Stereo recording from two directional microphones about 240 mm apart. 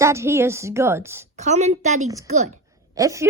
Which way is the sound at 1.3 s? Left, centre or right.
Right.